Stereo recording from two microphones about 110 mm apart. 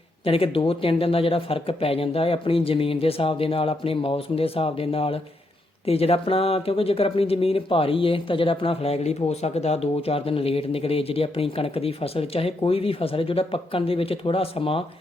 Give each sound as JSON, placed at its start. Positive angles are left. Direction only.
{"t": 0.3, "sound": "speech", "side_deg": 60}